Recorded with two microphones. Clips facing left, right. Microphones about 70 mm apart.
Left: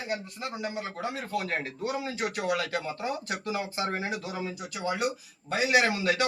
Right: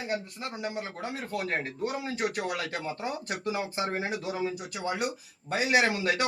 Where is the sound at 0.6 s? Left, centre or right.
Right.